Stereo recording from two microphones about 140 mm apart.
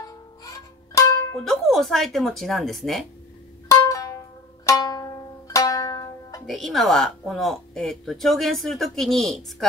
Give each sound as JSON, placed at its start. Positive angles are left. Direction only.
{"t": 1.4, "sound": "speech", "side_deg": 0}
{"t": 3.6, "sound": "music", "side_deg": 25}
{"t": 6.4, "sound": "speech", "side_deg": 0}